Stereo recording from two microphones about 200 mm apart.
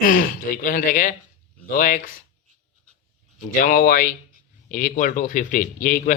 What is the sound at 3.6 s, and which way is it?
A man's voice, 45° left (ahead or behind).